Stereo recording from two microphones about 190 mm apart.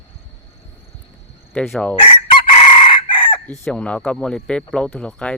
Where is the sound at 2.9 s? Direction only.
25° left (ahead or behind).